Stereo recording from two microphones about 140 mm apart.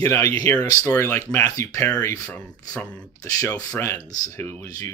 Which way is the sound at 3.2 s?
25° left (ahead or behind).